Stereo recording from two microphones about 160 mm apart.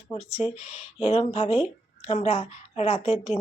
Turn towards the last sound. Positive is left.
turn(degrees=40)  # may be behind; listen again after turning